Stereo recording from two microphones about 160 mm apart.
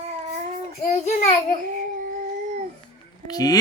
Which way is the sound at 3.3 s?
25° left (ahead or behind).